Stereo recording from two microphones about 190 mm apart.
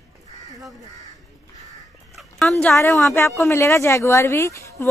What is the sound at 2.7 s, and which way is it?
A woman's voice, 15° left (ahead or behind).